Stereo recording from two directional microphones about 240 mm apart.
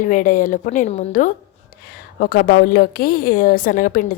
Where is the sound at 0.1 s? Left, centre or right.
Left.